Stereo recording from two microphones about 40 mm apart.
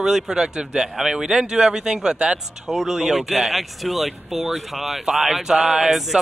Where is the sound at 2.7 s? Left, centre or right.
Centre.